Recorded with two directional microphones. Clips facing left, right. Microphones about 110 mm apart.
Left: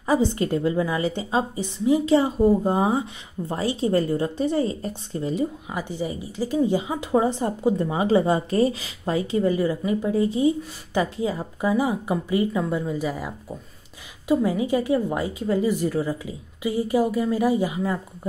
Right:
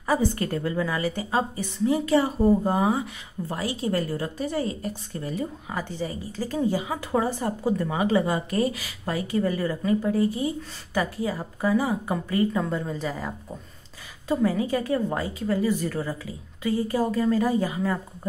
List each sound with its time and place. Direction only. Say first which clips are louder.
0.0 s a woman's voice: left 3 dB; 20° left (ahead or behind)